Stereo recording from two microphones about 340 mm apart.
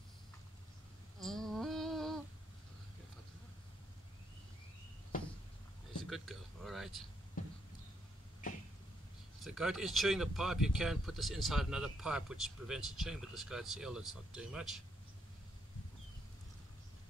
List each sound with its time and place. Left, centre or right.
1.2 s a sound: centre
6.0 s speech: centre
9.4 s speech: centre